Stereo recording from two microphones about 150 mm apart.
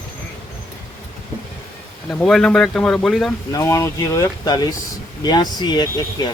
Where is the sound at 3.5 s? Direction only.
20° left (ahead or behind).